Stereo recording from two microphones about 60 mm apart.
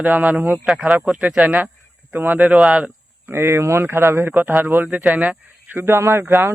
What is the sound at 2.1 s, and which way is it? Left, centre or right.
Speech, right.